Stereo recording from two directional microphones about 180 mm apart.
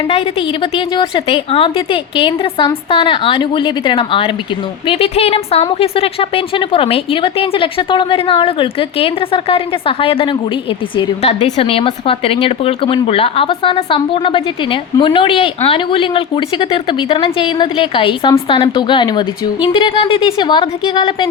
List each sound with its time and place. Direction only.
0.1 s a woman's voice: 30° left (ahead or behind)